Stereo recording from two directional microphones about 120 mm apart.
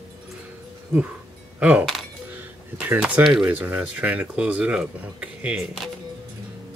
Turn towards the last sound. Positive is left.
turn(degrees=-10)  # may be behind; listen again after turning